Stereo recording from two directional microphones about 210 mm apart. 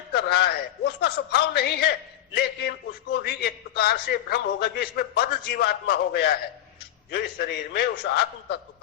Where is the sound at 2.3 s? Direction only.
50° left (ahead or behind).